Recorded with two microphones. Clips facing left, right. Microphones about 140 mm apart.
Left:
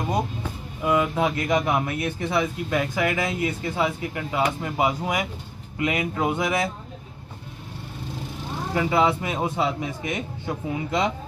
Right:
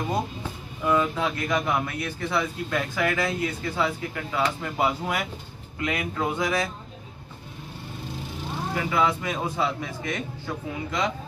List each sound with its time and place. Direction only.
0.8 s a man's voice: 20° left (ahead or behind)
8.9 s a man's voice: 25° left (ahead or behind)